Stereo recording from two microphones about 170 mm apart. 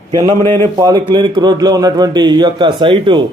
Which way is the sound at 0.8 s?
25° right (ahead or behind).